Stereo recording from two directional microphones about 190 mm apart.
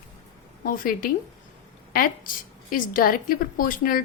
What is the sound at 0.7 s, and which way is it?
Speech, 45° left (ahead or behind).